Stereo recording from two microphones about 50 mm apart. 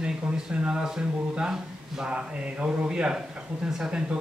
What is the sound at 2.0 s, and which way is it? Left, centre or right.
Speech, right.